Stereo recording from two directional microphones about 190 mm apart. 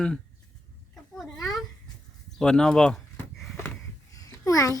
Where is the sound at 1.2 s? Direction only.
Centre (ahead or behind).